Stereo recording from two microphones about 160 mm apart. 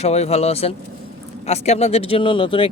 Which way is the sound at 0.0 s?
40° left (ahead or behind).